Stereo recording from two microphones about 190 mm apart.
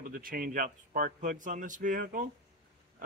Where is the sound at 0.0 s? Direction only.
50° right (ahead or behind).